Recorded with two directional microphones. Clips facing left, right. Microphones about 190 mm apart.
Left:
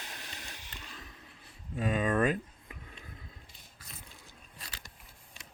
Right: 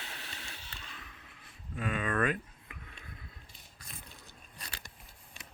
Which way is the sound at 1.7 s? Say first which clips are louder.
Left 4 dB; 35° left (ahead or behind).